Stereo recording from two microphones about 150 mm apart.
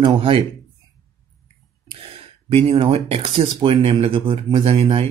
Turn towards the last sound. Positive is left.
turn(degrees=-40)  # may be behind; listen again after turning